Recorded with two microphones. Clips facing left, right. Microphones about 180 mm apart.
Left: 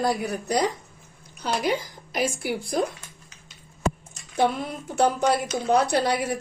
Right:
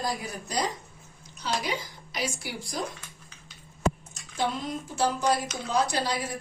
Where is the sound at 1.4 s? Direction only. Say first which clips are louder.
Left 6 dB; 50° left (ahead or behind).